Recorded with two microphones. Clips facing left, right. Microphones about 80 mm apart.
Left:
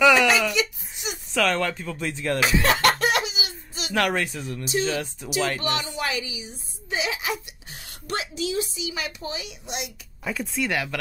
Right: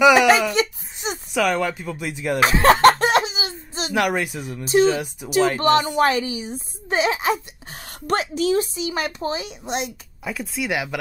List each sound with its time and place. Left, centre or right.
0.0 s speech: centre
0.5 s a sound: right
1.3 s speech: centre
2.4 s a sound: right
3.9 s speech: centre
4.6 s speech: right
4.9 s speech: centre
5.6 s speech: right
10.2 s speech: centre
10.7 s speech: centre